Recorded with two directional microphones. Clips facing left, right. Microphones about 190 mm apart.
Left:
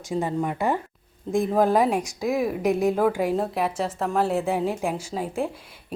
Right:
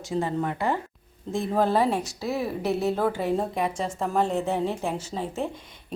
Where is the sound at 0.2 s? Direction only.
15° left (ahead or behind).